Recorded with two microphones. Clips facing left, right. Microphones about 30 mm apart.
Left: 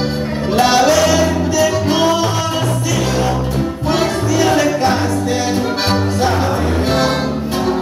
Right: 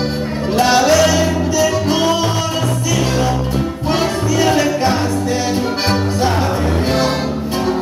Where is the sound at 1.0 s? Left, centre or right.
Centre.